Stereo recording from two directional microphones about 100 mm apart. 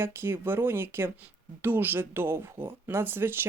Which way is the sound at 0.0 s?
25° right (ahead or behind).